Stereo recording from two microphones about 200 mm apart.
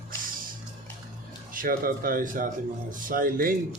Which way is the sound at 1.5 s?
45° right (ahead or behind).